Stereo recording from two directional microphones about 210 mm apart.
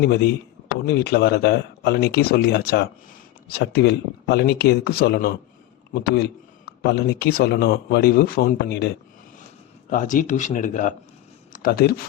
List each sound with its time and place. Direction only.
0.0 s speech: 50° left (ahead or behind)
9.9 s a man's voice: 40° left (ahead or behind)